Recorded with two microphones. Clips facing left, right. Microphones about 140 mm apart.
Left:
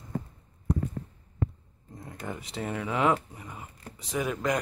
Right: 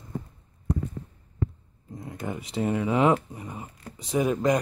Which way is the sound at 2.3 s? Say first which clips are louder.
Right 7 dB; 20° right (ahead or behind).